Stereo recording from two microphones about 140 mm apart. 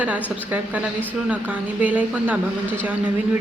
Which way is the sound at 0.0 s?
10° right (ahead or behind).